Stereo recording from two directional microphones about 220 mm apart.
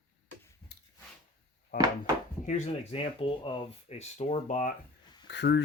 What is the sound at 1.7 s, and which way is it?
Wood, 40° left (ahead or behind).